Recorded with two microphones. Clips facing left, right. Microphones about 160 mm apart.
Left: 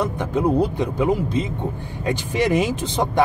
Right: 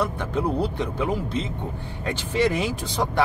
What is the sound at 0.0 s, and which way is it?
Speech, 15° left (ahead or behind).